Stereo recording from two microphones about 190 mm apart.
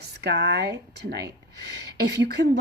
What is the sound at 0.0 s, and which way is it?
Speech, 60° right (ahead or behind).